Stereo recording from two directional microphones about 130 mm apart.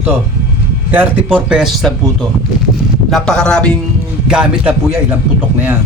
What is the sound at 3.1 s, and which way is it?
Speech, 5° left (ahead or behind).